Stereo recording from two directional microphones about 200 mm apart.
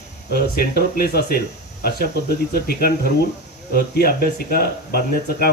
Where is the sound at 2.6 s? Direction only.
45° right (ahead or behind).